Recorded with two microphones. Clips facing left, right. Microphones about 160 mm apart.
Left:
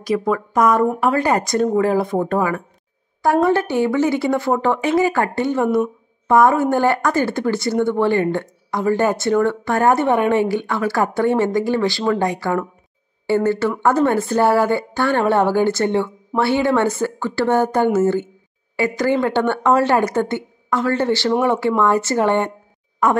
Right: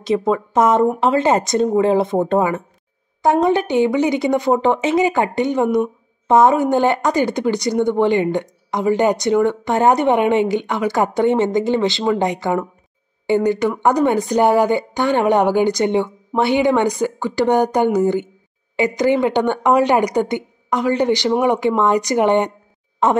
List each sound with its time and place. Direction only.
0.0 s speech: 25° right (ahead or behind)